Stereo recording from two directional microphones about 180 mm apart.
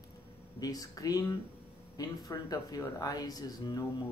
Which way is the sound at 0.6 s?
20° left (ahead or behind).